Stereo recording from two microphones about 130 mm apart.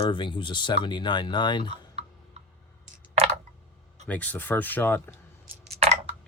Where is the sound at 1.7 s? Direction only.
55° right (ahead or behind).